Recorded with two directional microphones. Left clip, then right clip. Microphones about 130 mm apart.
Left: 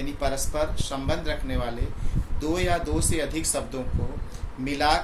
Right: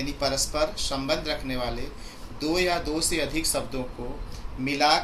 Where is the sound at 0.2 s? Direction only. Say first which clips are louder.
Right 1 dB; 25° left (ahead or behind).